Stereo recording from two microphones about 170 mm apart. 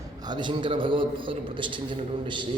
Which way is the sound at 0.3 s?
25° right (ahead or behind).